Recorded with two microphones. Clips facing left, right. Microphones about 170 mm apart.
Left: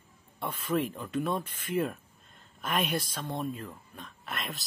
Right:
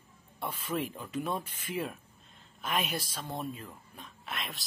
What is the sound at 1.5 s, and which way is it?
Speech, 55° left (ahead or behind).